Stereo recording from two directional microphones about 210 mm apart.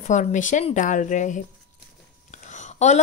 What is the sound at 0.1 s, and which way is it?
A woman's voice, 35° left (ahead or behind).